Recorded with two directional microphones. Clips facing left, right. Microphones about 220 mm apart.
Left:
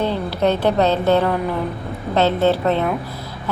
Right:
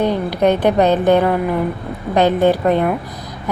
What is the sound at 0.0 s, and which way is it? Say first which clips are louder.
A woman's voice: right 4 dB; 15° right (ahead or behind).